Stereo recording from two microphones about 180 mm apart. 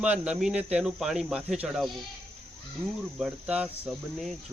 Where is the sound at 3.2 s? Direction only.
5° right (ahead or behind).